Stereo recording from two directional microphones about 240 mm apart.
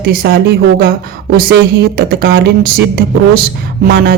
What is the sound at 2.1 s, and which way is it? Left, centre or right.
Speech, right.